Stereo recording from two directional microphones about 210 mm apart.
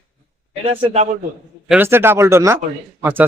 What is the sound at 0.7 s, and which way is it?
Speech, 30° right (ahead or behind).